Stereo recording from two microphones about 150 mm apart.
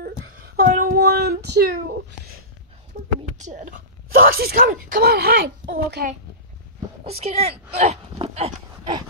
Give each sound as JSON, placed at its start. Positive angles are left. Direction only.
{"t": 0.6, "sound": "child singing", "side_deg": -75}
{"t": 2.9, "sound": "a sound", "side_deg": -55}
{"t": 3.3, "sound": "speech", "side_deg": -55}
{"t": 7.1, "sound": "speech", "side_deg": -45}